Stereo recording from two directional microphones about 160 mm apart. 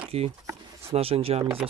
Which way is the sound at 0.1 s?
40° right (ahead or behind).